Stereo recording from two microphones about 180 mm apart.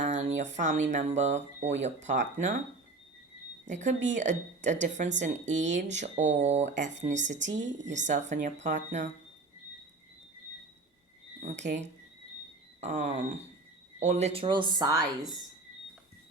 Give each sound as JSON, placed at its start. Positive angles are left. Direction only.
{"t": 0.0, "sound": "a sound", "side_deg": -40}
{"t": 0.5, "sound": "speech", "side_deg": -40}
{"t": 3.7, "sound": "speech", "side_deg": -40}
{"t": 5.5, "sound": "speech", "side_deg": -90}
{"t": 6.0, "sound": "speech", "side_deg": -40}
{"t": 11.4, "sound": "speech", "side_deg": -40}